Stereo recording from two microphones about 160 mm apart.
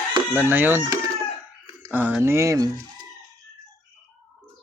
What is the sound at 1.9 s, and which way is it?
Speech, 10° right (ahead or behind).